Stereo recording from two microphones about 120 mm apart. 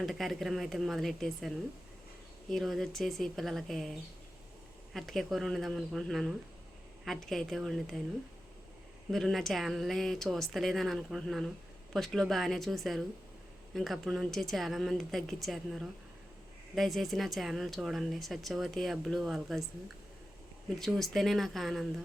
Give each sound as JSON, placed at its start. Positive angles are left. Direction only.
{"t": 0.0, "sound": "speech", "side_deg": 0}
{"t": 4.9, "sound": "speech", "side_deg": 0}
{"t": 9.0, "sound": "speech", "side_deg": 0}
{"t": 20.7, "sound": "speech", "side_deg": 0}